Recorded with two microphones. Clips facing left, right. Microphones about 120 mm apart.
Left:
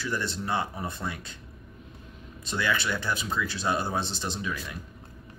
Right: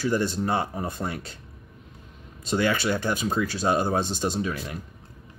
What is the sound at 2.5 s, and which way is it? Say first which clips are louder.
Speech: right 5 dB; 40° right (ahead or behind).